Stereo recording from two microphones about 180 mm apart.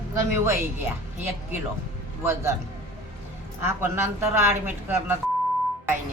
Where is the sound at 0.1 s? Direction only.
15° right (ahead or behind).